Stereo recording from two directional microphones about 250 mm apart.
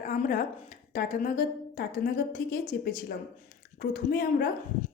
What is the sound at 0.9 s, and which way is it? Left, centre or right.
Speech, left.